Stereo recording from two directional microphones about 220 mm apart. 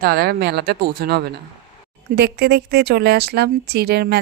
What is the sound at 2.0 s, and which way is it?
Speech, 45° right (ahead or behind).